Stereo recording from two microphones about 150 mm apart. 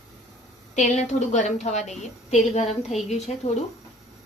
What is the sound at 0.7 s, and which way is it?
A woman's voice, 50° left (ahead or behind).